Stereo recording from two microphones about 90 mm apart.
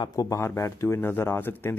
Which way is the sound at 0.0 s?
45° left (ahead or behind).